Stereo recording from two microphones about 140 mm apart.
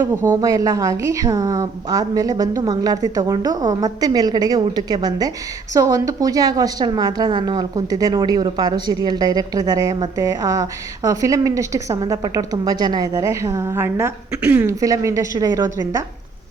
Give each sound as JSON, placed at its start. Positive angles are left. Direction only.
{"t": 0.3, "sound": "a woman's voice", "side_deg": -25}
{"t": 14.8, "sound": "a woman's voice", "side_deg": -25}